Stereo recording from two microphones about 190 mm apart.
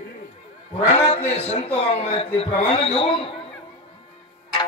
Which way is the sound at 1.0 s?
35° left (ahead or behind).